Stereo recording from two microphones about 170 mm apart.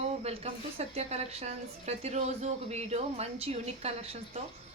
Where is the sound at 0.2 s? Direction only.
35° right (ahead or behind).